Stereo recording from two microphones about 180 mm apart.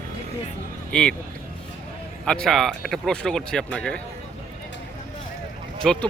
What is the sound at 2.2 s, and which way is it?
Speech, 5° left (ahead or behind).